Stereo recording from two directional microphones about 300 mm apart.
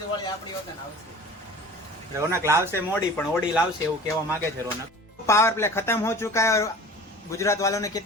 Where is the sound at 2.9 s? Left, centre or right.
Centre.